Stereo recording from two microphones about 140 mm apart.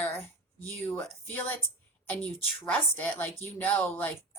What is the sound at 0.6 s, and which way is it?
Speech, 15° left (ahead or behind).